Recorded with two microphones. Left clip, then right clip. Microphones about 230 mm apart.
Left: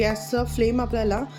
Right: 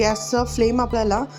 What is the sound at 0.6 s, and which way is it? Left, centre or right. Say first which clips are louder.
Speech: right 3 dB; centre.